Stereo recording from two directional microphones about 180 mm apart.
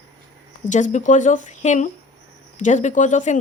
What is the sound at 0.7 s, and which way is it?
Speech, 45° left (ahead or behind).